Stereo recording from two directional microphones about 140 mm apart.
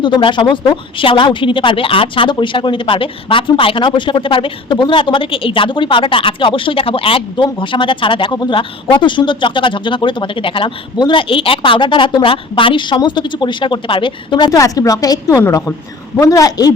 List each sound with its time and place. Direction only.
0.0 s a woman's voice: 35° left (ahead or behind)